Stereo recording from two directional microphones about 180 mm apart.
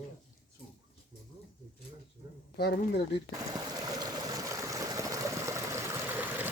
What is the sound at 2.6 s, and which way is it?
Speech, 65° left (ahead or behind).